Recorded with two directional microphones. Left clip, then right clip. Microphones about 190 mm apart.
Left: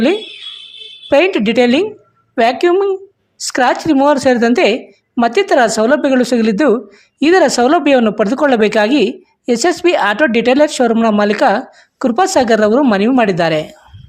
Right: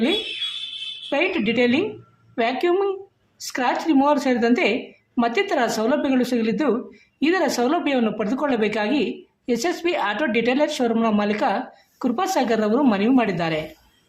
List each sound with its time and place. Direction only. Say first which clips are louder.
1.1 s a woman's voice: left 11 dB; 45° left (ahead or behind)